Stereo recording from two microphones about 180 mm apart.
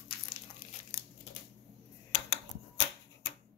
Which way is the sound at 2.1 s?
90° left.